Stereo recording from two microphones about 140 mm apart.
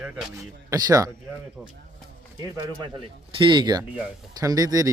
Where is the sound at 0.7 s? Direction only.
25° right (ahead or behind).